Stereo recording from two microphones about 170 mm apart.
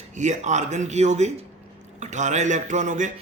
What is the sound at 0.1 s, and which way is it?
A man's voice, 45° right (ahead or behind).